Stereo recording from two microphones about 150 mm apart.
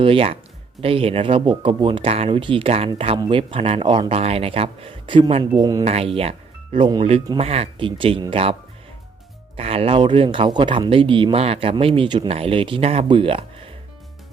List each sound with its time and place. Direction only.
0.0 s speech: 40° right (ahead or behind)
5.8 s speech: 45° right (ahead or behind)
9.6 s speech: 40° right (ahead or behind)